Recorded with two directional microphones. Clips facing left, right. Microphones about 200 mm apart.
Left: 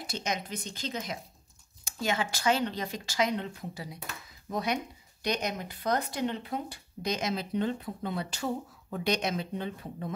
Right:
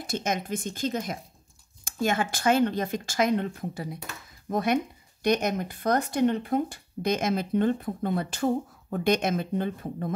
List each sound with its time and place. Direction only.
0.0 s speech: 50° right (ahead or behind)